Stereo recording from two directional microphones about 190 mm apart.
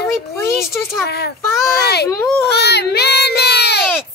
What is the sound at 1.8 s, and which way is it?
Speech, 55° left (ahead or behind).